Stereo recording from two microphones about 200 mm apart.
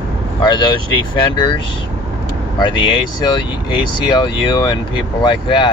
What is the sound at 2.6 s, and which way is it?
Speech, 25° left (ahead or behind).